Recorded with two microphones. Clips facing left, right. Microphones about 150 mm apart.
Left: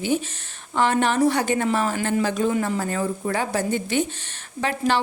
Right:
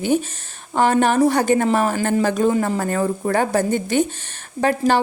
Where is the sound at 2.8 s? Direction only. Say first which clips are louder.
Right 4 dB; 50° right (ahead or behind).